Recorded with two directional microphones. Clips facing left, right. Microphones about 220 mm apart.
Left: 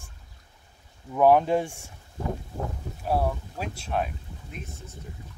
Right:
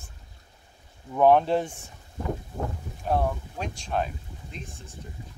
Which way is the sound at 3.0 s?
5° left (ahead or behind).